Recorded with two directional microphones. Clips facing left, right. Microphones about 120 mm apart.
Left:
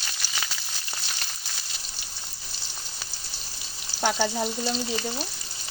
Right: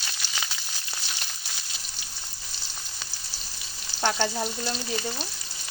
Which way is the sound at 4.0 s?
5° left (ahead or behind).